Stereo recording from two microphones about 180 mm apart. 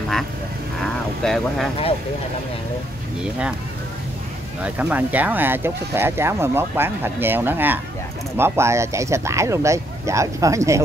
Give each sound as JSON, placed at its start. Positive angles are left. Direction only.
{"t": 1.2, "sound": "speech", "side_deg": 0}
{"t": 3.2, "sound": "speech", "side_deg": -5}
{"t": 4.6, "sound": "speech", "side_deg": -10}